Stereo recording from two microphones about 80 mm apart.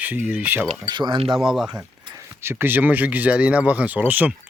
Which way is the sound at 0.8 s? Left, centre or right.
Right.